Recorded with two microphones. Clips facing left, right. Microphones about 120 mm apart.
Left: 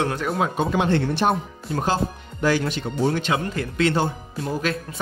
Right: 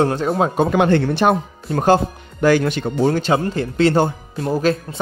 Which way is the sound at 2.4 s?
60° right (ahead or behind).